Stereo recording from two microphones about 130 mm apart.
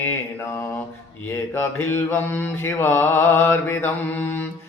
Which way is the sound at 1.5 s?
15° left (ahead or behind).